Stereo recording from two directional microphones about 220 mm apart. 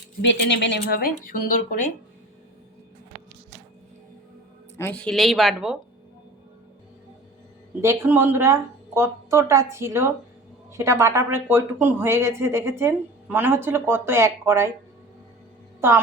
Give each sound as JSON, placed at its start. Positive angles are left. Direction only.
{"t": 0.2, "sound": "speech", "side_deg": 55}
{"t": 4.8, "sound": "speech", "side_deg": 5}
{"t": 7.8, "sound": "speech", "side_deg": -10}